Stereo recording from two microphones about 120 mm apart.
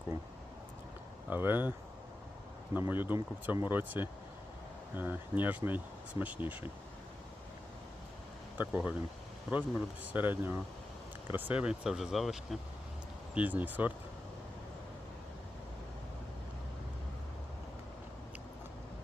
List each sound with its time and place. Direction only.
1.3 s speech: 15° right (ahead or behind)
2.7 s speech: 15° right (ahead or behind)
8.5 s speech: 15° right (ahead or behind)
13.3 s speech: 15° right (ahead or behind)